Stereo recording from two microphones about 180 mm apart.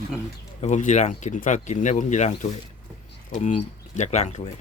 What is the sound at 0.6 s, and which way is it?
Speech, 40° left (ahead or behind).